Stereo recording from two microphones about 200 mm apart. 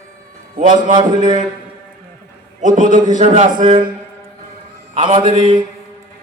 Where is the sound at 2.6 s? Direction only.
40° right (ahead or behind).